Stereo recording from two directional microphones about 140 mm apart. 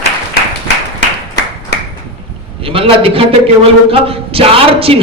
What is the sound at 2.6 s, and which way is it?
A man's voice, 40° right (ahead or behind).